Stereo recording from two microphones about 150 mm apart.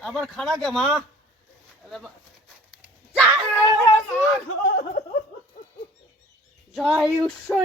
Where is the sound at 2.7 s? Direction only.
5° right (ahead or behind).